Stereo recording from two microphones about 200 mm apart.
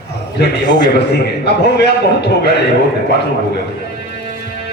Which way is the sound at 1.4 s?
55° left (ahead or behind).